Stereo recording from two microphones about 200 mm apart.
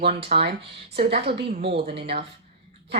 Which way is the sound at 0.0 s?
30° right (ahead or behind).